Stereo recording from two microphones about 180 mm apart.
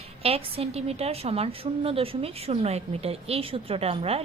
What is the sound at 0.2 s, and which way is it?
A woman's voice, 35° right (ahead or behind).